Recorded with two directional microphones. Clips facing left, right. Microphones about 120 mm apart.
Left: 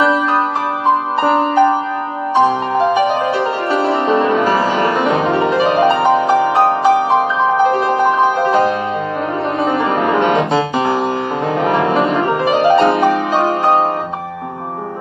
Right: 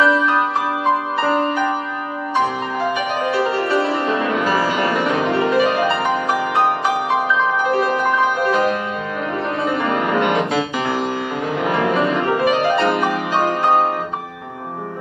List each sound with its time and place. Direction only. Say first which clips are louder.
1.2 s music: left 8 dB; 25° left (ahead or behind)
2.8 s music: left 7 dB; 30° left (ahead or behind)
10.8 s music: left 5 dB; 35° left (ahead or behind)
11.6 s music: left 3 dB; 25° left (ahead or behind)